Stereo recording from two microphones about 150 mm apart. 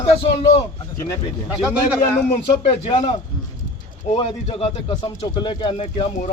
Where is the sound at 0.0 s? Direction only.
40° left (ahead or behind).